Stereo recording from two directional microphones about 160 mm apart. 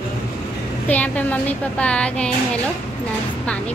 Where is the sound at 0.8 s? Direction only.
10° left (ahead or behind).